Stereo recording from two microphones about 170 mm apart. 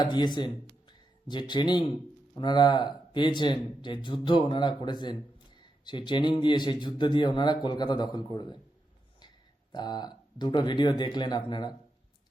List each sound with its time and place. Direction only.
0.0 s a man's voice: 25° left (ahead or behind)
9.7 s a man's voice: 25° left (ahead or behind)